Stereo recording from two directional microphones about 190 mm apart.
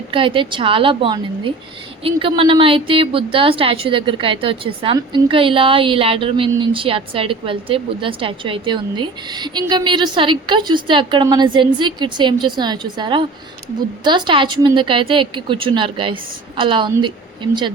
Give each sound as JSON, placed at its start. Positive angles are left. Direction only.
{"t": 0.1, "sound": "a woman's voice", "side_deg": -25}